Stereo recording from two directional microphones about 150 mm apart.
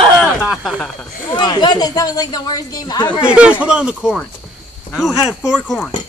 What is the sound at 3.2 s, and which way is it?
Speech, 5° right (ahead or behind).